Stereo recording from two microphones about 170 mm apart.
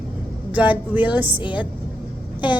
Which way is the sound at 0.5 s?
10° right (ahead or behind).